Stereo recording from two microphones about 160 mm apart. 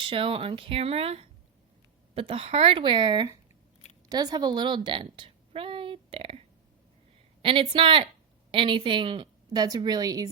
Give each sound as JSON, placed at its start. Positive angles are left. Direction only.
{"t": 0.0, "sound": "a woman's voice", "side_deg": -35}
{"t": 7.4, "sound": "a woman's voice", "side_deg": -35}